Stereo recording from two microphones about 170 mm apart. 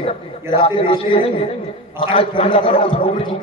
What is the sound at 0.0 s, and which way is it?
A man's voice, 30° left (ahead or behind).